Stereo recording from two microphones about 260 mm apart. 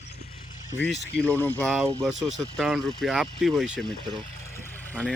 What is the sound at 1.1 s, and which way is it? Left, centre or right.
Speech, centre.